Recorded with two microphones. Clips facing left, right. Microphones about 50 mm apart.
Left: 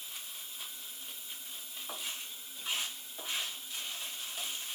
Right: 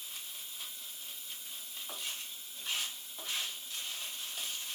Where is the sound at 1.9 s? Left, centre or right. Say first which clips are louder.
Left 1 dB; centre.